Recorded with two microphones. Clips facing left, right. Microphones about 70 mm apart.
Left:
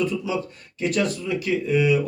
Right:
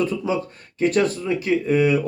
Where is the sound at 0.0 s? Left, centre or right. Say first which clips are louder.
Right 2 dB; right.